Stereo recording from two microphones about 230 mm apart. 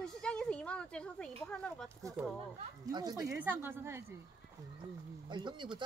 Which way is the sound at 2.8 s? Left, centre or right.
Centre.